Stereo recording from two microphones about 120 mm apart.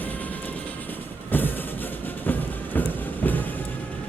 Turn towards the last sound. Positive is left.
turn(degrees=15)  # may be behind; listen again after turning